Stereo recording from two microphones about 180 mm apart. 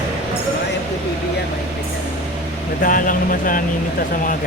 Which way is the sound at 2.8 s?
50° left (ahead or behind).